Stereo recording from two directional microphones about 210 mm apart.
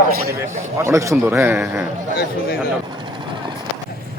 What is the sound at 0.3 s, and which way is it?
Speech, 10° right (ahead or behind).